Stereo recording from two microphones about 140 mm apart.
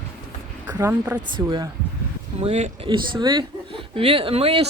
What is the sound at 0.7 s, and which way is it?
A woman's voice, 20° right (ahead or behind).